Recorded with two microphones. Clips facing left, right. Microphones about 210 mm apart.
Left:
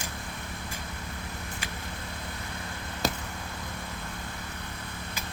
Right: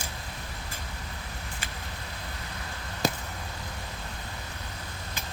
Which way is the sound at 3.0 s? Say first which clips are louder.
Right 2 dB; centre (ahead or behind).